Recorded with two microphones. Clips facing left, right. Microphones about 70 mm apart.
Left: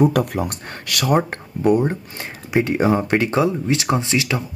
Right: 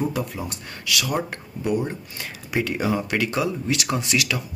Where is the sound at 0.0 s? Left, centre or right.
Left.